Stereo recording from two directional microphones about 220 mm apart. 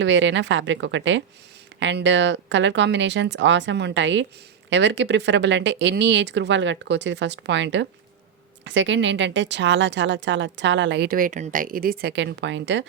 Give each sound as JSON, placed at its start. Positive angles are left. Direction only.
{"t": 0.0, "sound": "speech", "side_deg": -55}